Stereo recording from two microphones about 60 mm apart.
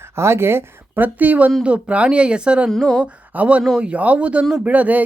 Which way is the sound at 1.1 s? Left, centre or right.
Right.